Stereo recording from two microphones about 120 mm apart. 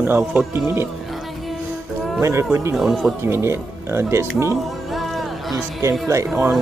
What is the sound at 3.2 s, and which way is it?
Speech, 20° right (ahead or behind).